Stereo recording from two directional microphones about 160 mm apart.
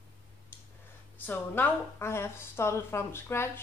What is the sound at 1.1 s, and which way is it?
A woman's voice, 10° left (ahead or behind).